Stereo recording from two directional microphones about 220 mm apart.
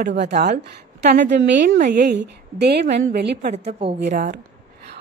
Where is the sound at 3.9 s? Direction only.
50° right (ahead or behind).